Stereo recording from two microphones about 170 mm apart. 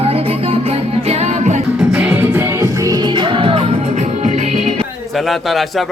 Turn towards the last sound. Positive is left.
turn(degrees=0)  # may be behind; listen again after turning